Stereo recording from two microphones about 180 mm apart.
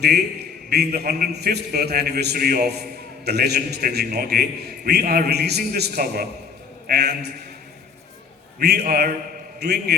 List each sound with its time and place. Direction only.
0.7 s a man's voice: 60° right (ahead or behind)
8.5 s a man's voice: 60° right (ahead or behind)